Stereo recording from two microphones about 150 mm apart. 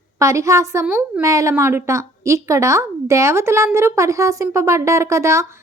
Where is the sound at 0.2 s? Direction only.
20° right (ahead or behind).